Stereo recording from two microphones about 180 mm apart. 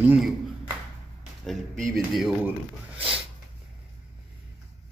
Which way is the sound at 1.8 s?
Centre (ahead or behind).